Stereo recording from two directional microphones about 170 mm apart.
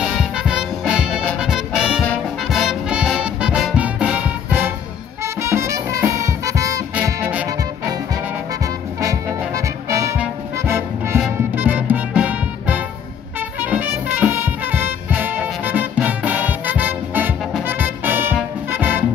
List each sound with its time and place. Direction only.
0.0 s music: centre (ahead or behind)
9.6 s music: 15° right (ahead or behind)